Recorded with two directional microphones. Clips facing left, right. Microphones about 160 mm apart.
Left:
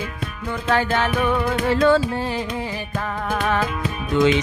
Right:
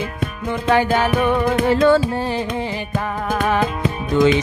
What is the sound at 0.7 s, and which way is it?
Music, 15° right (ahead or behind).